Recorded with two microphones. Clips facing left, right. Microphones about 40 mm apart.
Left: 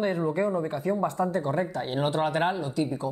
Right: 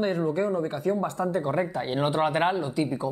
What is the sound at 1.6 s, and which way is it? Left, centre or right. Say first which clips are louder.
Speech: right 1 dB; centre.